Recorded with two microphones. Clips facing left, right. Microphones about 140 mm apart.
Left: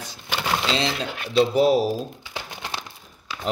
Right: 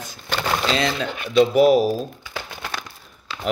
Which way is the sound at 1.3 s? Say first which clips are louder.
Right 3 dB; 30° left (ahead or behind).